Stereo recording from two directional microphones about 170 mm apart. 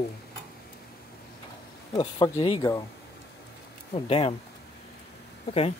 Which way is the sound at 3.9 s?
35° left (ahead or behind).